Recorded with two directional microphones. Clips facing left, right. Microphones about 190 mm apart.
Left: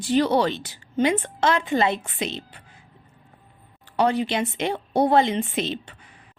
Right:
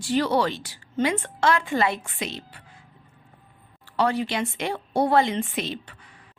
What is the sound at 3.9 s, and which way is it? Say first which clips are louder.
A woman's voice: left 2 dB; 20° left (ahead or behind).